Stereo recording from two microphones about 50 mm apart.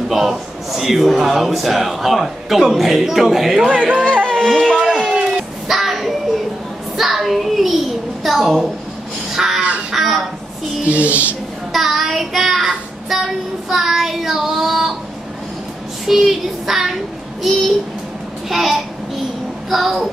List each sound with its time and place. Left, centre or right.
0.1 s speech: centre
3.6 s speech: right
4.3 s a sound: centre
5.7 s child singing: centre
7.0 s a sound: centre
9.3 s crow: centre
9.9 s a sound: centre
10.9 s speech: right
11.7 s child singing: centre
16.1 s speech: centre
18.5 s speech: centre